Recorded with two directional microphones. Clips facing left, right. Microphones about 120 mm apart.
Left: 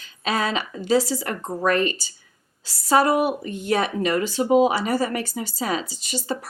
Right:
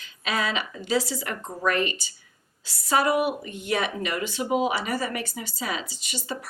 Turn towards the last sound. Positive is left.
turn(degrees=35)  # may be behind; listen again after turning